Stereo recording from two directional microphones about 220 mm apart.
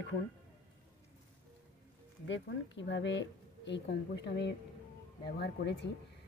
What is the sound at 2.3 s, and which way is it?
Speech, 55° left (ahead or behind).